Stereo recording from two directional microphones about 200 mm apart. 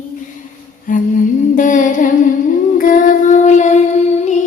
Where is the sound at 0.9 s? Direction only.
40° left (ahead or behind).